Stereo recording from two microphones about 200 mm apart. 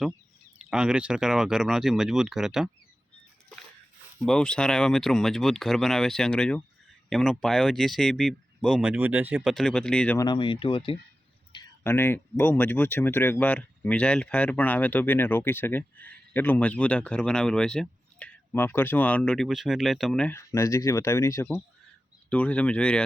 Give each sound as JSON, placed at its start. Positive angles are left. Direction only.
{"t": 0.6, "sound": "speech", "side_deg": -5}
{"t": 4.3, "sound": "speech", "side_deg": 5}
{"t": 10.2, "sound": "speech", "side_deg": 20}
{"t": 11.8, "sound": "speech", "side_deg": 10}